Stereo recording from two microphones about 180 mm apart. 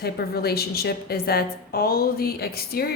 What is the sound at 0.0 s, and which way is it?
A woman's voice, 60° left (ahead or behind).